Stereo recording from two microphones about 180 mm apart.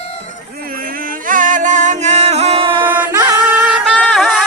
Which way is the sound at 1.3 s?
45° right (ahead or behind).